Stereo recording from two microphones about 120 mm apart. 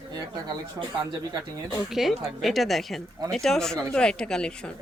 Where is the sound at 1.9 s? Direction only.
Centre (ahead or behind).